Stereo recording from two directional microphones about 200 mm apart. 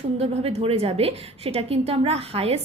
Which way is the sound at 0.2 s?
30° right (ahead or behind).